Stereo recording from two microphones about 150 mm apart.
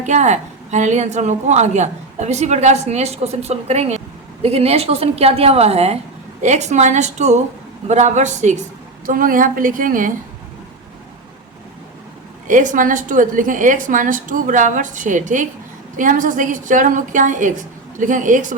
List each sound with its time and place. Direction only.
0.0 s a woman's voice: 50° right (ahead or behind)
9.0 s a woman's voice: 65° right (ahead or behind)
12.5 s a woman's voice: 60° right (ahead or behind)